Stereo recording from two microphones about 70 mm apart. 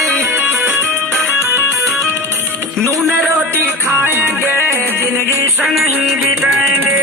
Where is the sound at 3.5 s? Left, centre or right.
Right.